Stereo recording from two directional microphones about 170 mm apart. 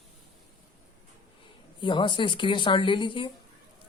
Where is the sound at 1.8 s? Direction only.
30° left (ahead or behind).